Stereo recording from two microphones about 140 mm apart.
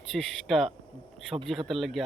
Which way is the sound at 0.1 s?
5° left (ahead or behind).